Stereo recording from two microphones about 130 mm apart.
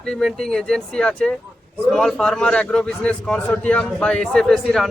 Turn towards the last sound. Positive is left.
turn(degrees=0)  # may be behind; listen again after turning